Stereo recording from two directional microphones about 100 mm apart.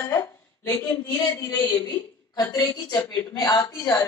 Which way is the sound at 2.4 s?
35° left (ahead or behind).